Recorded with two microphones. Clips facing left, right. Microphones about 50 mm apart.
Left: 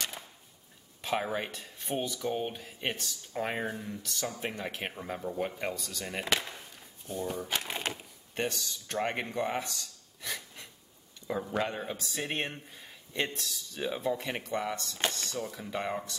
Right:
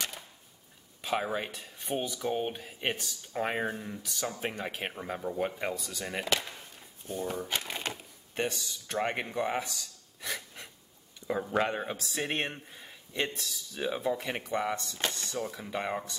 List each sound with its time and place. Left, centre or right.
1.0 s speech: centre
7.4 s speech: centre
7.9 s a sound: centre
8.5 s speech: centre
15.5 s speech: centre